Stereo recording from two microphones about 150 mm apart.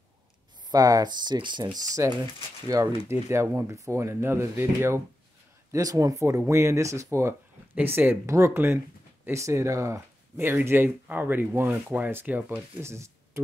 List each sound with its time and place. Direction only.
0.7 s speech: 25° right (ahead or behind)